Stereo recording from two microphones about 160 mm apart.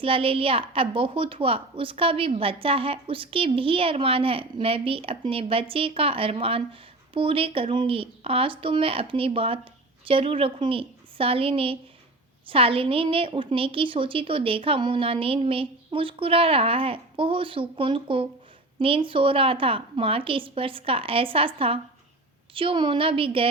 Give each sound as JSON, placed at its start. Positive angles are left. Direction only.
{"t": 0.0, "sound": "a woman's voice", "side_deg": -35}